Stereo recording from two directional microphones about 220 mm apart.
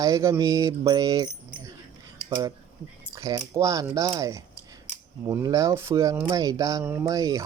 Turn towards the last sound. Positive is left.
turn(degrees=-15)  # may be behind; listen again after turning